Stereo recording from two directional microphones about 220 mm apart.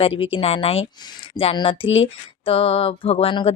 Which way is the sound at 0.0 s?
25° left (ahead or behind).